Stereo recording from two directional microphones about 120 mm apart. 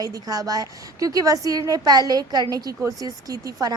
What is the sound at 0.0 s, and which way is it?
A woman's voice, 30° right (ahead or behind).